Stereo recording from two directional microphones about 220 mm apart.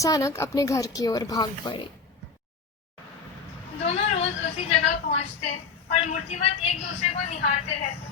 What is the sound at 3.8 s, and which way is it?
Speech, 30° left (ahead or behind).